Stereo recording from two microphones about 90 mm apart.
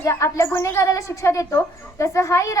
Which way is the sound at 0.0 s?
35° left (ahead or behind).